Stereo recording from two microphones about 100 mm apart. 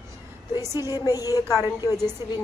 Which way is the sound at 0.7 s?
35° left (ahead or behind).